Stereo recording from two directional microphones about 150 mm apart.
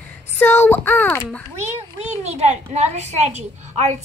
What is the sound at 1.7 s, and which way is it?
A child's voice, 45° right (ahead or behind).